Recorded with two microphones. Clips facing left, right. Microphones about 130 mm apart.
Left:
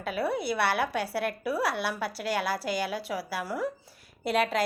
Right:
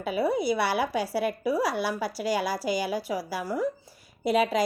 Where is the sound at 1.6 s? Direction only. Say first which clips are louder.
Right 2 dB; 65° left (ahead or behind).